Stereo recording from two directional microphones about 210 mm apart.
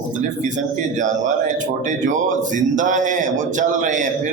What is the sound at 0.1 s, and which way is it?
Speech, 35° right (ahead or behind).